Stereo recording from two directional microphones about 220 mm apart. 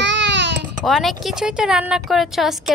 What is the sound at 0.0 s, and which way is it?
Babbling, 55° right (ahead or behind).